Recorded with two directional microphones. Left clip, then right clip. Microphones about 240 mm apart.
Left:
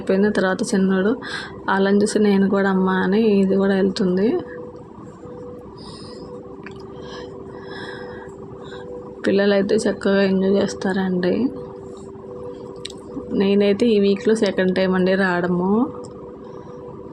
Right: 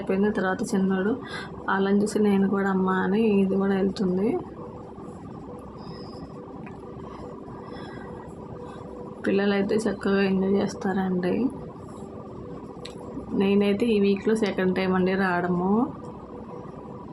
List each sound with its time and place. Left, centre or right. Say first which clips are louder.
0.1 s a woman's voice: left 7 dB; left
9.2 s a woman's voice: left 7 dB; centre
13.4 s speech: left 6 dB; centre